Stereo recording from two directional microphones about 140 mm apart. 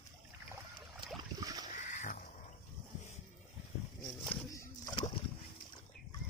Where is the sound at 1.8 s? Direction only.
65° left (ahead or behind).